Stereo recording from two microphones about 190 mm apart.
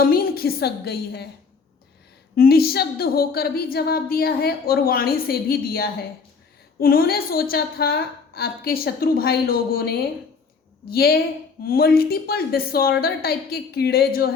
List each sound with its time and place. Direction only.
0.0 s a woman's voice: 50° left (ahead or behind)
2.3 s a woman's voice: 55° left (ahead or behind)